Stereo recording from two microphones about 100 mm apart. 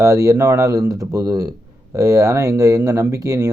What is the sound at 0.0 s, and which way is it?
Speech, 35° right (ahead or behind).